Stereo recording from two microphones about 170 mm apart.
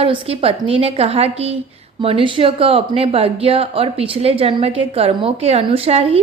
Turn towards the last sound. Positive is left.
turn(degrees=-35)  # may be behind; listen again after turning